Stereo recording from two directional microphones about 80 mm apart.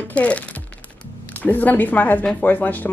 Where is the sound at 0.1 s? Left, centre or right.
Centre.